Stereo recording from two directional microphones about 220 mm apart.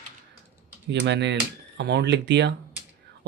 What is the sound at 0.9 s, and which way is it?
Speech, 50° right (ahead or behind).